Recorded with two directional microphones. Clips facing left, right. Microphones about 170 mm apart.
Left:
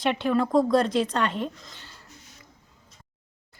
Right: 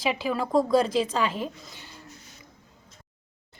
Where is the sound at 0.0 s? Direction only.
5° right (ahead or behind).